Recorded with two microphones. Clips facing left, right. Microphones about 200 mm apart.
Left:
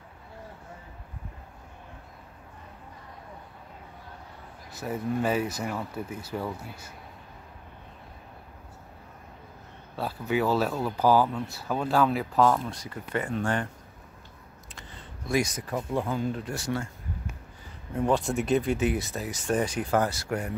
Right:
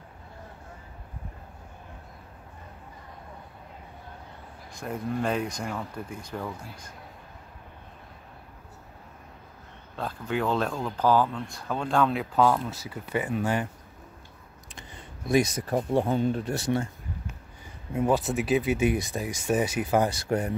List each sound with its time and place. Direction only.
4.7 s speech: 5° left (ahead or behind)
9.9 s speech: 5° left (ahead or behind)
14.8 s speech: 20° right (ahead or behind)
17.9 s speech: 5° right (ahead or behind)
20.2 s speech: 30° right (ahead or behind)